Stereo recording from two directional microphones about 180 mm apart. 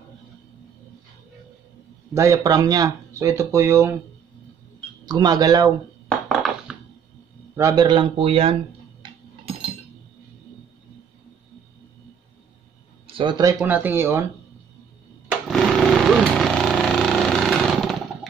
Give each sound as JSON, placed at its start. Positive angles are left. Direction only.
{"t": 2.1, "sound": "speech", "side_deg": -20}
{"t": 5.0, "sound": "speech", "side_deg": -20}
{"t": 6.0, "sound": "dishes", "side_deg": 0}
{"t": 7.5, "sound": "speech", "side_deg": -20}
{"t": 13.0, "sound": "speech", "side_deg": -30}
{"t": 13.6, "sound": "speech", "side_deg": -10}
{"t": 15.4, "sound": "a sound", "side_deg": 0}